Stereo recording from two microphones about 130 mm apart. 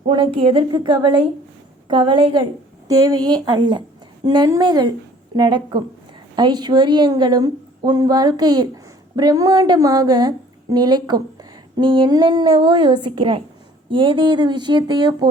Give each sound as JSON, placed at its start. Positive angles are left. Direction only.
{"t": 0.1, "sound": "a woman's voice", "side_deg": -40}